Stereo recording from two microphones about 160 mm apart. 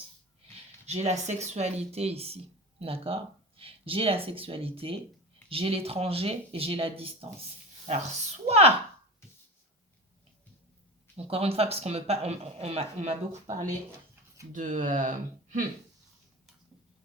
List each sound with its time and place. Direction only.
0.9 s speech: 45° right (ahead or behind)
11.3 s speech: 40° right (ahead or behind)
14.5 s speech: 50° right (ahead or behind)